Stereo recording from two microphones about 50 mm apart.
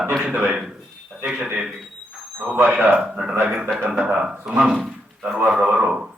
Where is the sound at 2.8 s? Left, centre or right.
Right.